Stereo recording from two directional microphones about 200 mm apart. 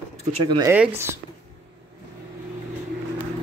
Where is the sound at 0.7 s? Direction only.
10° right (ahead or behind).